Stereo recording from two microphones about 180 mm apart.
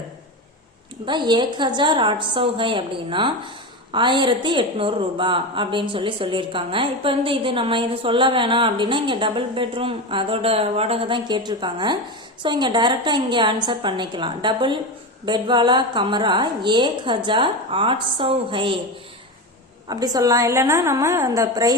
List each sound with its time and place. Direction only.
1.0 s a woman's voice: 25° right (ahead or behind)
19.9 s a woman's voice: 20° right (ahead or behind)